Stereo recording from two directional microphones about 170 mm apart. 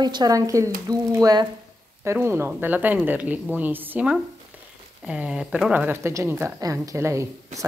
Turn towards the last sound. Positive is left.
turn(degrees=-15)  # may be behind; listen again after turning